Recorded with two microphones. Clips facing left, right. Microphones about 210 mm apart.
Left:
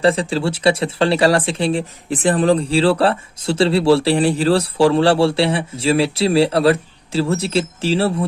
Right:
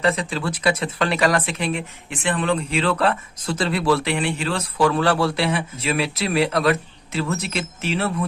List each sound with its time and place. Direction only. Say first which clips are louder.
0.0 s speech: left 6 dB; 30° left (ahead or behind)